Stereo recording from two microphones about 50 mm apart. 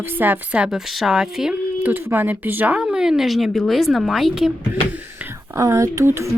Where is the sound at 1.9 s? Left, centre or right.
Right.